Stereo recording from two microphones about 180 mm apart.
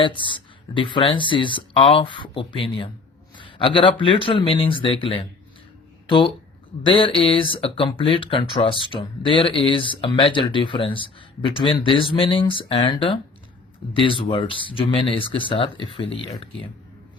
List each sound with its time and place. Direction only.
0.0 s speech: 25° left (ahead or behind)